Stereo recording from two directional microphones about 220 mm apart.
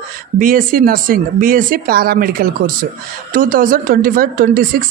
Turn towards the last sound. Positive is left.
turn(degrees=-40)  # may be behind; listen again after turning